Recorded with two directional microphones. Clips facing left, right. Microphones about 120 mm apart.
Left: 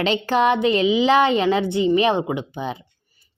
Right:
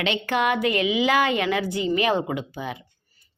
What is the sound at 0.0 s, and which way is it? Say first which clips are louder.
Speech: left 5 dB; 35° left (ahead or behind).